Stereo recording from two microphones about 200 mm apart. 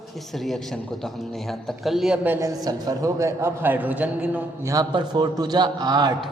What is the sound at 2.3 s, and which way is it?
A man's voice, 15° right (ahead or behind).